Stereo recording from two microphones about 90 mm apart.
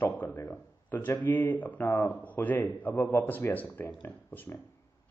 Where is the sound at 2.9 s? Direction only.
30° left (ahead or behind).